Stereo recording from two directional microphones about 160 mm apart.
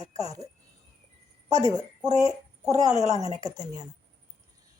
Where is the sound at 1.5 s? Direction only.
20° right (ahead or behind).